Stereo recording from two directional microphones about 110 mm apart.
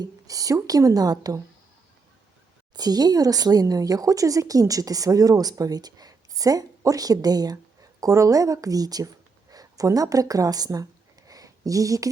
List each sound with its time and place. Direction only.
0.0 s speech: 30° right (ahead or behind)
2.7 s speech: 35° right (ahead or behind)
11.3 s a sound: 35° right (ahead or behind)